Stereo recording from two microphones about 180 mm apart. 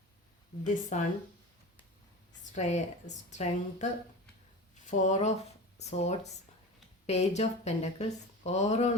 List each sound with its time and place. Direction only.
0.6 s speech: 45° left (ahead or behind)
2.4 s a woman's voice: 40° left (ahead or behind)
4.9 s a woman's voice: 40° left (ahead or behind)